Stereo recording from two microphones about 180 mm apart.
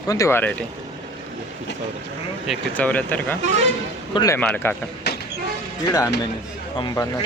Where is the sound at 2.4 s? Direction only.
10° left (ahead or behind).